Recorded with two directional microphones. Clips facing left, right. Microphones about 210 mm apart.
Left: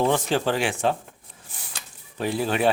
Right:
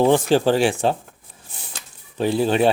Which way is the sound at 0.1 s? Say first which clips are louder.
Right 7 dB; 30° right (ahead or behind).